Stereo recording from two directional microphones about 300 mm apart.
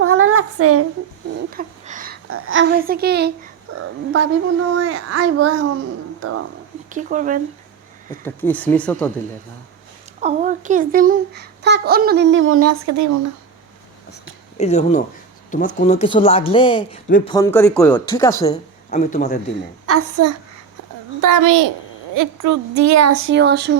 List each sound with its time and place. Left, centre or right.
0.0 s child singing: right
1.5 s a sound: right
2.3 s a child's voice: right
3.7 s a woman's voice: right
6.9 s speech: right
8.2 s speech: centre
10.2 s a child's voice: right
14.6 s speech: left
17.1 s speech: left
17.3 s speech: centre
18.9 s speech: left
19.9 s a child's voice: right
21.2 s a child's voice: right
22.1 s a woman's voice: right